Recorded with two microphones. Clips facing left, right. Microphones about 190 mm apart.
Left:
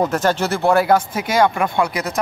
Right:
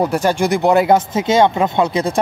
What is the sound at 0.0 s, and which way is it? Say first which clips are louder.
Speech: right 2 dB; 10° right (ahead or behind).